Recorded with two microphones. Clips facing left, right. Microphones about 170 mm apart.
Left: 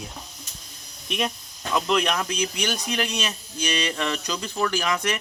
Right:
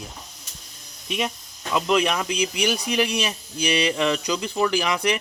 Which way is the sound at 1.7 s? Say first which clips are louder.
Right 2 dB; 10° right (ahead or behind).